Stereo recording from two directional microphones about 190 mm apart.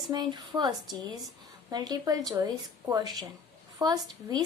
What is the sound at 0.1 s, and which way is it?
Speech, 20° right (ahead or behind).